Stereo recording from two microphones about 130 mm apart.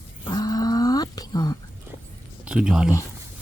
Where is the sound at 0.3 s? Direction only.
30° left (ahead or behind).